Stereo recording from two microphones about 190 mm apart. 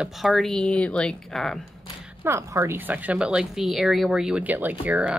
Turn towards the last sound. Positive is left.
turn(degrees=-5)  # may be behind; listen again after turning